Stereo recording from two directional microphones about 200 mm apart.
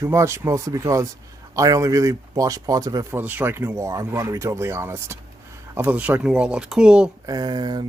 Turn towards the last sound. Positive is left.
turn(degrees=-20)  # may be behind; listen again after turning